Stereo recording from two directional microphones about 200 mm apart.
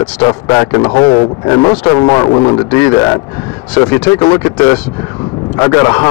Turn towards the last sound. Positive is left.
turn(degrees=15)  # may be behind; listen again after turning